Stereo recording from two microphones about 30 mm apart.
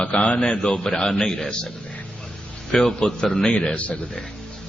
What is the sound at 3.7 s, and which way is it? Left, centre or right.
Speech, left.